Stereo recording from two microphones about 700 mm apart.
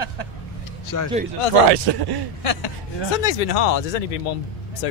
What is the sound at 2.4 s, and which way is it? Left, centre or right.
Speech, left.